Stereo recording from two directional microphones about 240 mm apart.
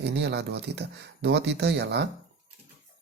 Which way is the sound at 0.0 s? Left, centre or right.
Right.